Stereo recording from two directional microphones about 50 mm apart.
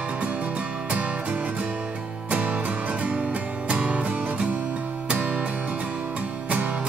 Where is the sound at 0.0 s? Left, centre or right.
Right.